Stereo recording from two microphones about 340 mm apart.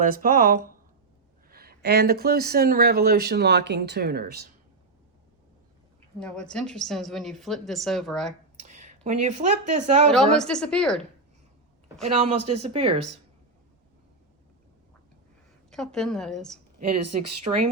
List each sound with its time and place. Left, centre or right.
0.0 s speech: right
6.1 s a woman's voice: centre
8.6 s speech: right
10.3 s a woman's voice: centre
12.0 s speech: centre
15.7 s a woman's voice: centre
16.8 s speech: right
17.5 s speech: centre